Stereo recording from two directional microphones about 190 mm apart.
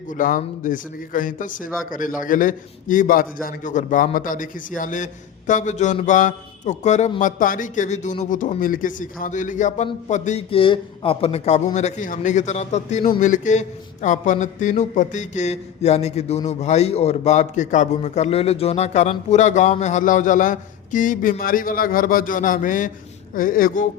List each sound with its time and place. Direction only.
0.1 s a man's voice: 45° left (ahead or behind)